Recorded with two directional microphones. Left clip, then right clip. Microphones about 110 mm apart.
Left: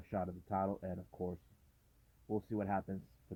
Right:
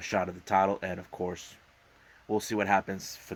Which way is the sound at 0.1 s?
25° right (ahead or behind).